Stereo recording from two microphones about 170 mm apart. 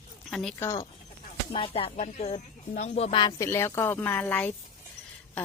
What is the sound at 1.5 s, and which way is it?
Speech, 30° left (ahead or behind).